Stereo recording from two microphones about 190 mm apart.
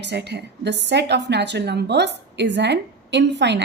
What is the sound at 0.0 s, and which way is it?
A woman's voice, 60° right (ahead or behind).